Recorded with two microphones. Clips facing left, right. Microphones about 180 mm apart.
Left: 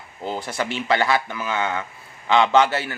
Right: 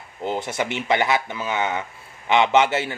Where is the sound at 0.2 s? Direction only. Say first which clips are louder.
Right 2 dB; 20° right (ahead or behind).